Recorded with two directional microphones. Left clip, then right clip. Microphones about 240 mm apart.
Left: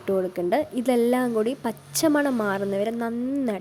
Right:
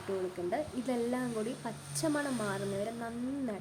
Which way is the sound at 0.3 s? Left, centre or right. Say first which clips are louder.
Left 11 dB; left.